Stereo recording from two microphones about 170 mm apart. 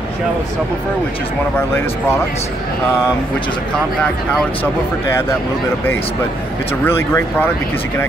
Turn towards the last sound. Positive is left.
turn(degrees=15)  # may be behind; listen again after turning